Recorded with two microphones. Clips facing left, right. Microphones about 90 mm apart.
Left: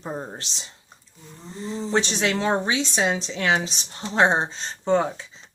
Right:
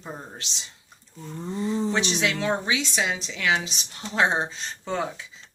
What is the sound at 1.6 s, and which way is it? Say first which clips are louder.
Speech: left 1 dB; 35° left (ahead or behind).